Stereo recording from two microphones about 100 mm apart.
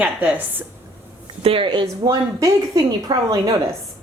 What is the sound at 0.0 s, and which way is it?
Speech, 15° right (ahead or behind).